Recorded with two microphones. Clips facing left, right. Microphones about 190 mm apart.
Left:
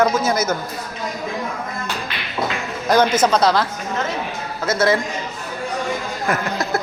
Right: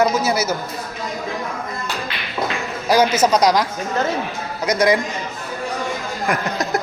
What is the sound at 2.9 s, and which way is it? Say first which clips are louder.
Speech: even; 10° right (ahead or behind).